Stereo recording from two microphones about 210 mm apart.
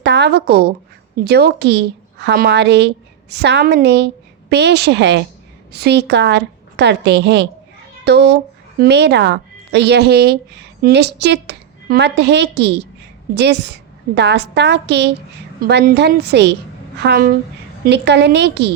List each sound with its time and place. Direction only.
0.0 s a woman's voice: 55° right (ahead or behind)